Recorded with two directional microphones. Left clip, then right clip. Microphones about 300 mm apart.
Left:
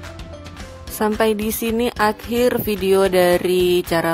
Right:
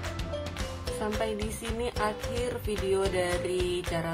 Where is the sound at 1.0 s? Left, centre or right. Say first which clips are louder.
Left 14 dB; left.